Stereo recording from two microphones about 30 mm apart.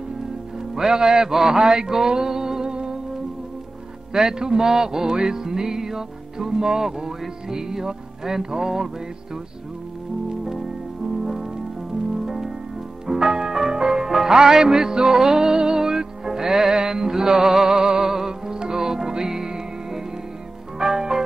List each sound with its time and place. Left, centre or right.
0.7 s speech: centre
1.3 s mantra: centre
4.1 s music: centre
12.3 s music: centre